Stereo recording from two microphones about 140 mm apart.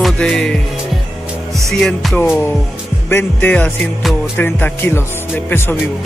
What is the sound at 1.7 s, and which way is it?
Music, centre (ahead or behind).